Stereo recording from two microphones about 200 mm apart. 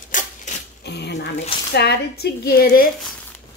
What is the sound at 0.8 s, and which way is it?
A woman's voice, 55° left (ahead or behind).